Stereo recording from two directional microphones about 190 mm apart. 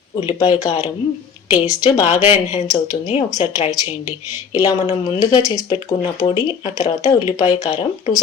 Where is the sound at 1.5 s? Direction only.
20° left (ahead or behind).